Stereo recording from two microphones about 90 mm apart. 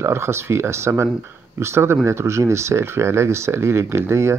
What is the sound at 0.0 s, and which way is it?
Speech, 30° right (ahead or behind).